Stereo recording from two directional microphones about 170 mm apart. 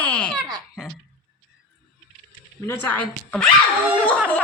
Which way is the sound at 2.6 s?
10° left (ahead or behind).